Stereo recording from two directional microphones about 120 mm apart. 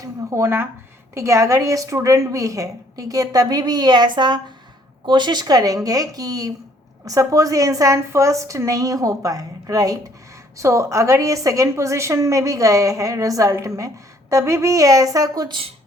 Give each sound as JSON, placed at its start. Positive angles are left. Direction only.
{"t": 0.0, "sound": "a woman's voice", "side_deg": -25}